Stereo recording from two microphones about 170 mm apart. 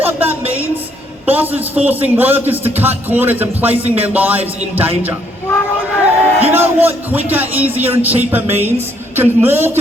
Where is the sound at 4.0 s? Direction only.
10° right (ahead or behind).